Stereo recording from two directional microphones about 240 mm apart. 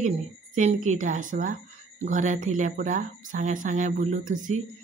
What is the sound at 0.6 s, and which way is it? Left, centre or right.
Speech, right.